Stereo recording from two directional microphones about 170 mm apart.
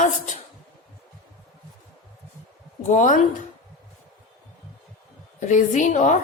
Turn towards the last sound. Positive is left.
turn(degrees=45)  # may be behind; listen again after turning